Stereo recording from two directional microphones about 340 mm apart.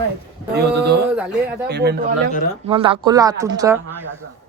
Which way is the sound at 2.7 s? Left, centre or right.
Centre.